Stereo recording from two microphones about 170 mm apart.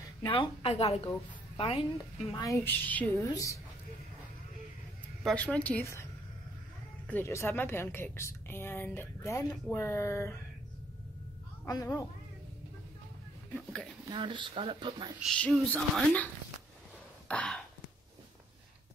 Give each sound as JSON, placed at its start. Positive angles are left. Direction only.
{"t": 0.2, "sound": "a woman's voice", "side_deg": 30}
{"t": 2.4, "sound": "a woman's voice", "side_deg": 15}
{"t": 5.2, "sound": "a woman's voice", "side_deg": 5}
{"t": 7.1, "sound": "a woman's voice", "side_deg": 15}
{"t": 11.6, "sound": "speech", "side_deg": 20}
{"t": 14.0, "sound": "speech", "side_deg": -25}
{"t": 15.1, "sound": "a woman's voice", "side_deg": 5}
{"t": 17.3, "sound": "a sound", "side_deg": 5}